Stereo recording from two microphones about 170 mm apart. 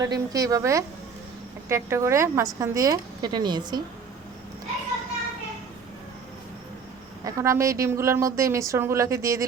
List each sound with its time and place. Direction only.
0.0 s a woman's voice: 20° right (ahead or behind)
7.3 s speech: 20° right (ahead or behind)